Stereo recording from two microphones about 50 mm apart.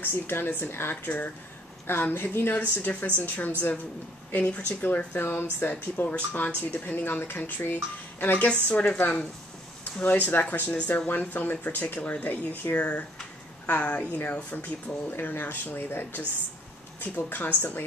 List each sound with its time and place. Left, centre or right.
0.0 s a woman's voice: left
1.0 s a woman's voice: left
4.8 s speech: left
6.0 s speech: left
8.6 s a woman's voice: left